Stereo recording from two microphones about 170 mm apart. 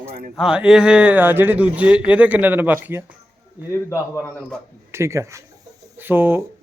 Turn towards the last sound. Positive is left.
turn(degrees=-10)  # may be behind; listen again after turning